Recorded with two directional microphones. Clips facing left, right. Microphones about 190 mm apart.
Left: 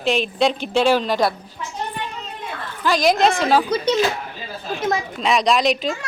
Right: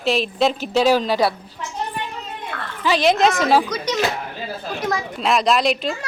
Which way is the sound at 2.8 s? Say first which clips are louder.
Even; centre (ahead or behind).